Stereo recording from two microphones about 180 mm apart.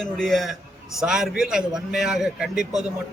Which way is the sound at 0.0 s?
Centre (ahead or behind).